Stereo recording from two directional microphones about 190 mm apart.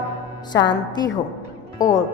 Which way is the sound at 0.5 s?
20° left (ahead or behind).